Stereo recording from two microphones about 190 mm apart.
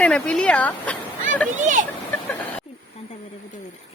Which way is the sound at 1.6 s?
40° right (ahead or behind).